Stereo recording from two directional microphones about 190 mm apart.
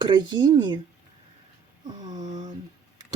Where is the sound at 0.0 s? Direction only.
25° right (ahead or behind).